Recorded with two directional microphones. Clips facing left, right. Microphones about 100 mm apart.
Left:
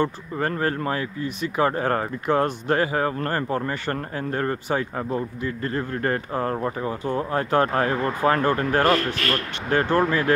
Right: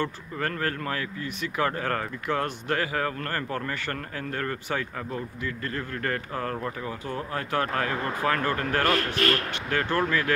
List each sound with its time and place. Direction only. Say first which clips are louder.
0.0 s speech: left 5 dB; 25° left (ahead or behind)